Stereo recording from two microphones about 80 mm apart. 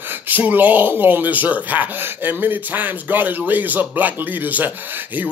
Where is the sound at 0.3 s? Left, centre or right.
Right.